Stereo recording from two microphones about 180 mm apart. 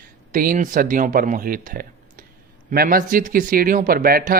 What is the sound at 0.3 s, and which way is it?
A man's voice, 45° right (ahead or behind).